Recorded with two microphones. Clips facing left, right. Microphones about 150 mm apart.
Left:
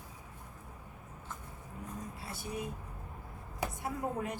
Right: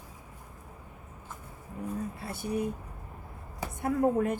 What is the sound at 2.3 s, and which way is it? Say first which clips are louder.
Speech: right 8 dB; 55° right (ahead or behind).